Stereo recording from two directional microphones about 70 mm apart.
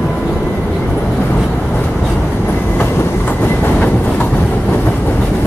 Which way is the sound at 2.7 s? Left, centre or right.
Left.